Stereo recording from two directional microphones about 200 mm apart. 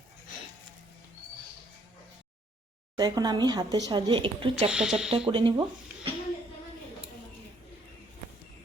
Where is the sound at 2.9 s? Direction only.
20° right (ahead or behind).